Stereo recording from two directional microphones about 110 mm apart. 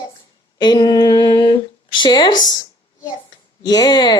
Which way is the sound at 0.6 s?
40° left (ahead or behind).